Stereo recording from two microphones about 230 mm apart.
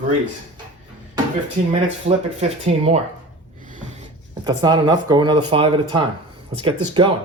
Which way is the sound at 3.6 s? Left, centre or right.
Right.